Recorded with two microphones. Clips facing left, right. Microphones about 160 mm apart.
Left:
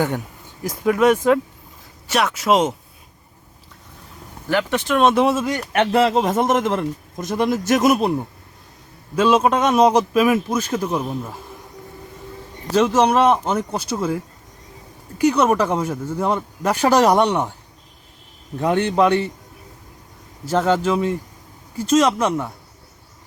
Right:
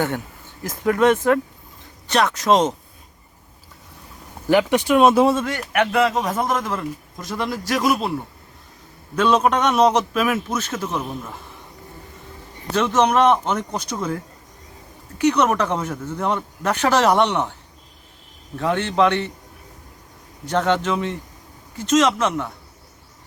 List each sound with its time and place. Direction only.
0.6 s speech: 10° left (ahead or behind)
4.4 s speech: 15° right (ahead or behind)
5.7 s a man's voice: 30° left (ahead or behind)
9.1 s speech: 5° left (ahead or behind)
12.7 s a man's voice: 30° left (ahead or behind)
13.0 s speech: 10° left (ahead or behind)
15.2 s speech: 10° left (ahead or behind)
18.5 s speech: 15° left (ahead or behind)
20.4 s speech: 5° left (ahead or behind)